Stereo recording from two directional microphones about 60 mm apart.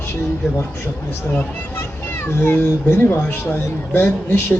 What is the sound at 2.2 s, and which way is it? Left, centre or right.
Speech, left.